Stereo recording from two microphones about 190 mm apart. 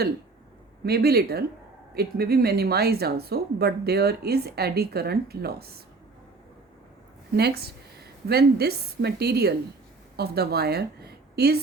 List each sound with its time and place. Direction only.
0.9 s speech: 55° right (ahead or behind)
7.3 s a woman's voice: 55° right (ahead or behind)